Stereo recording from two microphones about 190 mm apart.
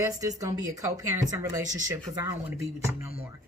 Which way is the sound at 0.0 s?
15° right (ahead or behind).